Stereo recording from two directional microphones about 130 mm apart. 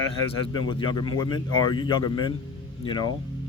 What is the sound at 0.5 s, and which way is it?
Speech, 35° left (ahead or behind).